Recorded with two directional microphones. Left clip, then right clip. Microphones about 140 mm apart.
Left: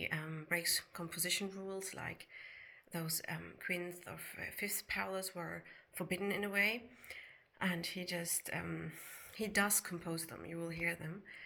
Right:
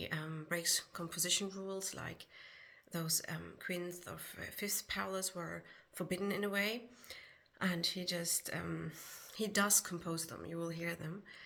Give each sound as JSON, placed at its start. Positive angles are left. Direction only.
{"t": 0.0, "sound": "a sound", "side_deg": -40}
{"t": 0.5, "sound": "speech", "side_deg": -35}
{"t": 5.3, "sound": "speech", "side_deg": -20}
{"t": 6.0, "sound": "speech", "side_deg": -40}